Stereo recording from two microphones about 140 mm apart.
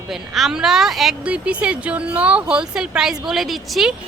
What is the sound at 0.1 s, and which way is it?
A woman's voice, centre (ahead or behind).